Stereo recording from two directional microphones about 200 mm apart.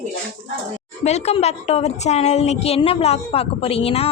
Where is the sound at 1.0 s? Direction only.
30° left (ahead or behind).